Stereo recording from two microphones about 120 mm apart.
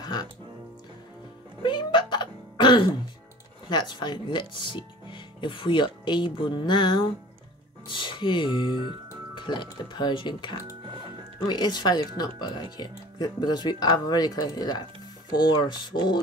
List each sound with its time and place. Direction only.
0.0 s music: 35° left (ahead or behind)
1.6 s a sound: 40° left (ahead or behind)
3.6 s speech: 40° left (ahead or behind)